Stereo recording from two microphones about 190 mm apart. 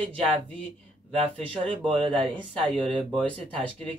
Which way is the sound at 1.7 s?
30° right (ahead or behind).